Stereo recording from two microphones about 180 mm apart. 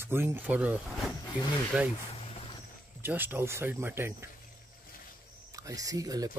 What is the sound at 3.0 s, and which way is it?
Speech, 10° right (ahead or behind).